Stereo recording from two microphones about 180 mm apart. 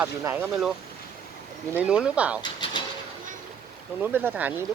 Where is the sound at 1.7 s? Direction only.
5° right (ahead or behind).